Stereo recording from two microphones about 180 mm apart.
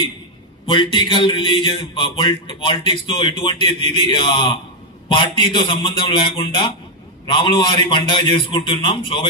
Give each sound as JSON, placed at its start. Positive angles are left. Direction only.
{"t": 0.7, "sound": "speech", "side_deg": 25}